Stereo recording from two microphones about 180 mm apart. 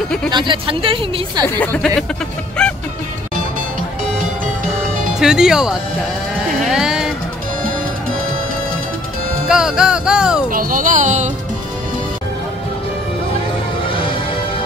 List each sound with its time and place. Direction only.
0.3 s speech: 25° right (ahead or behind)
1.6 s speech: 10° left (ahead or behind)
5.2 s music: 5° right (ahead or behind)
9.5 s music: 5° right (ahead or behind)
10.5 s speech: 50° right (ahead or behind)